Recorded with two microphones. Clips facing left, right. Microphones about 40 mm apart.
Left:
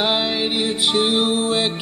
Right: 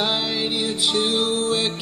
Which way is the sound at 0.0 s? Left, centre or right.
Left.